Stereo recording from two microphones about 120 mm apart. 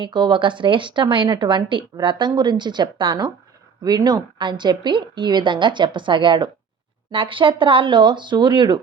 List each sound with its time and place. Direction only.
0.0 s a woman's voice: 40° right (ahead or behind)